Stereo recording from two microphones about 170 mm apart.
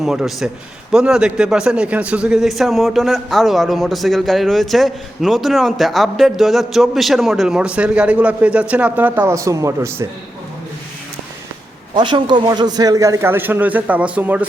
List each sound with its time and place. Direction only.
0.0 s a man's voice: 5° right (ahead or behind)
11.9 s a man's voice: 25° right (ahead or behind); by 14.4 s 10° right (ahead or behind)